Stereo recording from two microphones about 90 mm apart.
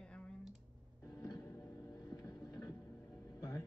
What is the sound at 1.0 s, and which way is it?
Music, 40° left (ahead or behind).